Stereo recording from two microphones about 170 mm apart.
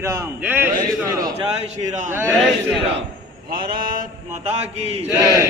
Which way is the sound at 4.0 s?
45° right (ahead or behind).